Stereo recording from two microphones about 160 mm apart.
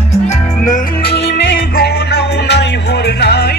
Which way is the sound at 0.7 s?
65° left (ahead or behind).